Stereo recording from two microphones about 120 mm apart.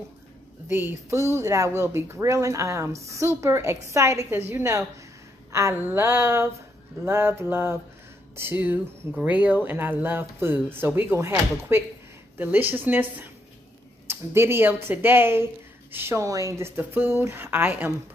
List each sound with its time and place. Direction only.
0.7 s speech: 15° right (ahead or behind)